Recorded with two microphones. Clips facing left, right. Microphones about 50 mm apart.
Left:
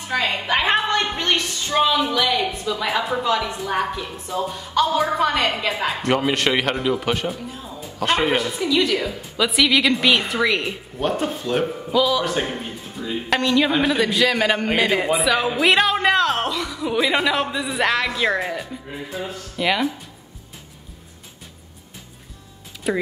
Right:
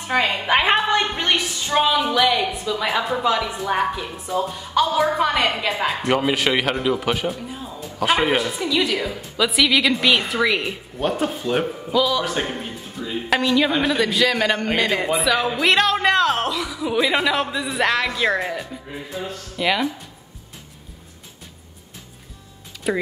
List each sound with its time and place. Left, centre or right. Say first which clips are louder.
0.1 s a woman's voice: right 2 dB; centre
0.7 s a woman's voice: right 1 dB; centre
22.8 s speech: even; centre